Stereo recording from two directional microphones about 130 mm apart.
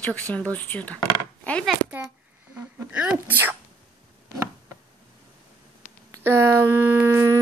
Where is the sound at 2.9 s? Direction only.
10° right (ahead or behind).